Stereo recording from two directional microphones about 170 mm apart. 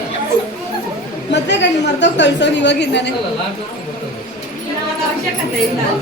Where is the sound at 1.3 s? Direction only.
90° left.